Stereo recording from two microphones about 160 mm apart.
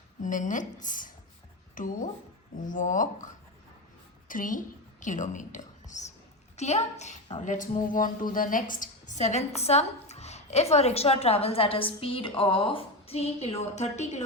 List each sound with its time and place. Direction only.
0.2 s a woman's voice: 55° left (ahead or behind)